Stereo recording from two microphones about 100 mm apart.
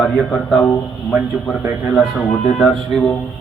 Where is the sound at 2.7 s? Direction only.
5° left (ahead or behind).